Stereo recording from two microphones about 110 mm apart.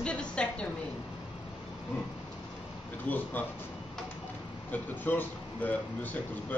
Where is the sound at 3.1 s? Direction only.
15° left (ahead or behind).